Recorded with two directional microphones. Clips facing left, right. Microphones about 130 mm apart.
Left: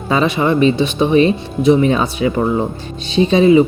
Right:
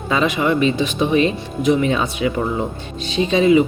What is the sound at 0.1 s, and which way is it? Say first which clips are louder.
Speech: left 3 dB; 35° left (ahead or behind).